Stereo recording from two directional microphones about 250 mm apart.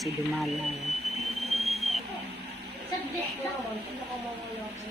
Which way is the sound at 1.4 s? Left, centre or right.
Centre.